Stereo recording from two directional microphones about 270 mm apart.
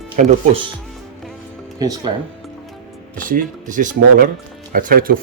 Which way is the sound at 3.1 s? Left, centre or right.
Right.